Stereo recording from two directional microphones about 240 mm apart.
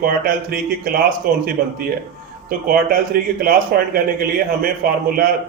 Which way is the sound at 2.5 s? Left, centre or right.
Right.